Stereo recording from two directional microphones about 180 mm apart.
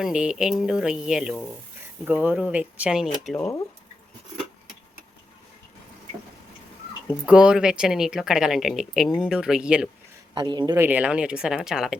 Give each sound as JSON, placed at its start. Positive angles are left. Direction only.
{"t": 0.0, "sound": "speech", "side_deg": -5}
{"t": 7.1, "sound": "speech", "side_deg": -5}
{"t": 10.3, "sound": "speech", "side_deg": -25}
{"t": 10.8, "sound": "speech", "side_deg": -10}